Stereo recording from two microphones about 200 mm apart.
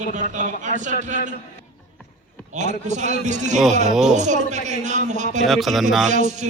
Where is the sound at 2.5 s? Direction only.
35° right (ahead or behind).